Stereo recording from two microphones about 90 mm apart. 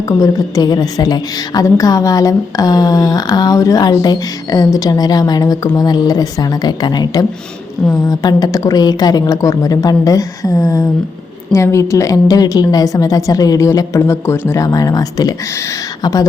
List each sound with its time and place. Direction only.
0.2 s a woman's voice: 45° left (ahead or behind)